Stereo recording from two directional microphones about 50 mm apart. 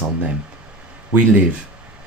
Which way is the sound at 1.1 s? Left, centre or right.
Right.